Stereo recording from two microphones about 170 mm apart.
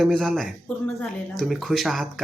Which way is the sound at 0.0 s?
Centre (ahead or behind).